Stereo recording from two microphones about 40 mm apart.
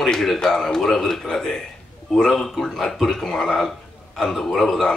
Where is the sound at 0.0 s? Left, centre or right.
Centre.